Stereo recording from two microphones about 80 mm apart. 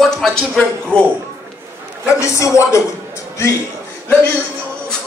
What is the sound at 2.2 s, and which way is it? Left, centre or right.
Speech, left.